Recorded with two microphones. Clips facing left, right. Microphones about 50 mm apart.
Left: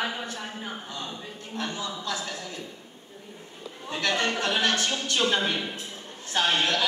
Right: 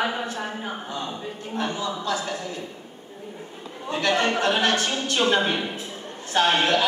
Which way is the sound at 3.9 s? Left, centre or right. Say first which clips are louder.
Right 4 dB; centre.